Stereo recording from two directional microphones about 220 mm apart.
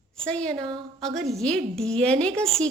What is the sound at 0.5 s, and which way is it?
Speech, 20° right (ahead or behind).